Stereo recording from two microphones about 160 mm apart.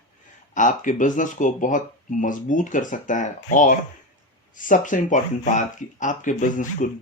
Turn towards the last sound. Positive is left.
turn(degrees=50)  # may be behind; listen again after turning